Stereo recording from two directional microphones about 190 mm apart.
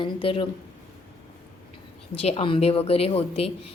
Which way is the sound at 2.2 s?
30° left (ahead or behind).